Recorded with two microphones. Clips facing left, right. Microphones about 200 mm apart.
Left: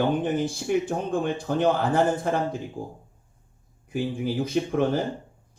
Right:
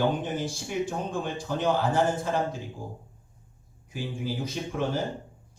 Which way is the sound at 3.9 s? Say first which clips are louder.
Left 6 dB; 55° left (ahead or behind).